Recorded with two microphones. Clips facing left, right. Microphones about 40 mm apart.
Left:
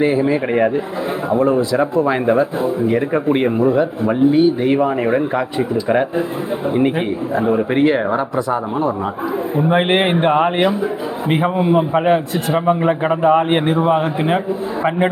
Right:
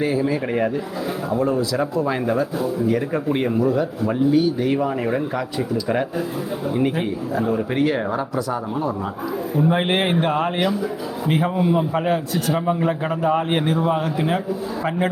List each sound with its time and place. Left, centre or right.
0.0 s speech: left
7.3 s speech: left
9.6 s speech: left